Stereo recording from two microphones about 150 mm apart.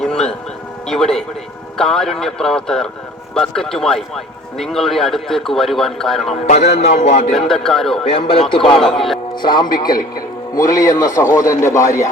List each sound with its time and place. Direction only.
0.0 s music: 5° left (ahead or behind)
0.9 s speech: 5° left (ahead or behind)
6.4 s speech: 45° left (ahead or behind)
7.3 s speech: centre (ahead or behind)
8.0 s speech: 40° left (ahead or behind)
8.8 s speech: centre (ahead or behind)
9.3 s a man's voice: 30° left (ahead or behind)